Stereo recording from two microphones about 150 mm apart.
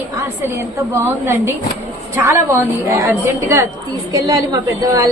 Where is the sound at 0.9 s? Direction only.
15° right (ahead or behind).